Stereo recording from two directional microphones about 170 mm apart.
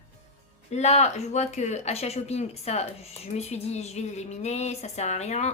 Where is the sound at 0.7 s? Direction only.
40° left (ahead or behind).